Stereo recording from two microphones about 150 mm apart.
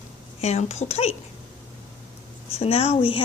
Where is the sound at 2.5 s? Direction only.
40° left (ahead or behind).